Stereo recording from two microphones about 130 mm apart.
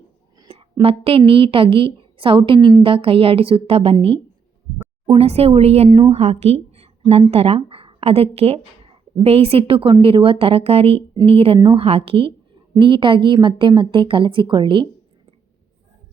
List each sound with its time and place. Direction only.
0.4 s a woman's voice: 45° right (ahead or behind)